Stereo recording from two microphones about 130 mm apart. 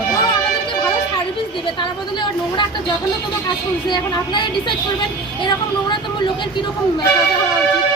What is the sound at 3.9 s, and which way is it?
Speech, 35° left (ahead or behind).